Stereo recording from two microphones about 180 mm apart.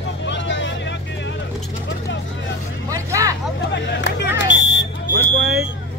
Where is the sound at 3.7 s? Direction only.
75° left (ahead or behind).